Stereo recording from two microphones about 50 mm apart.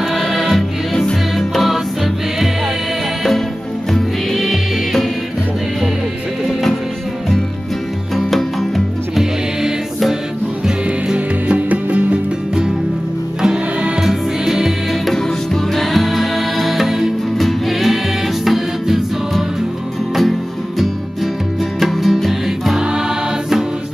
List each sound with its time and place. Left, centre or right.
0.0 s music: centre
3.9 s music: centre
8.2 s music: centre
11.1 s music: right
13.4 s music: centre
15.1 s music: centre
22.8 s choir: centre